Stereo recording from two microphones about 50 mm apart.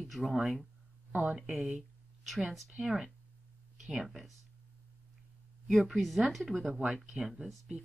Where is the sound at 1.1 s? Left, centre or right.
Right.